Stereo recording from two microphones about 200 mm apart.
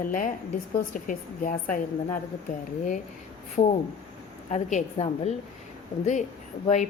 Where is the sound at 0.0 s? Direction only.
40° left (ahead or behind).